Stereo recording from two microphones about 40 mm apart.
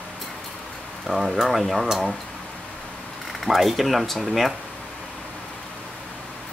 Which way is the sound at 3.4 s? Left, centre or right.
Centre.